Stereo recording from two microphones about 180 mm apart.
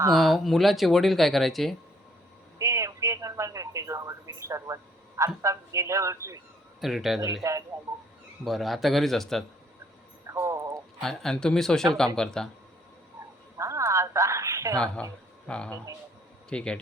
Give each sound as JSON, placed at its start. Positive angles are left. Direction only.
{"t": 0.1, "sound": "speech", "side_deg": 0}
{"t": 2.6, "sound": "speech", "side_deg": -15}
{"t": 6.8, "sound": "speech", "side_deg": 0}
{"t": 7.4, "sound": "speech", "side_deg": -15}
{"t": 8.4, "sound": "speech", "side_deg": 0}
{"t": 10.2, "sound": "a sound", "side_deg": -15}
{"t": 11.0, "sound": "speech", "side_deg": 0}
{"t": 13.6, "sound": "a sound", "side_deg": -15}
{"t": 15.0, "sound": "speech", "side_deg": 5}